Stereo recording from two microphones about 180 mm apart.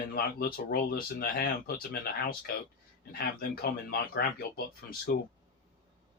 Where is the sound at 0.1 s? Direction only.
55° left (ahead or behind).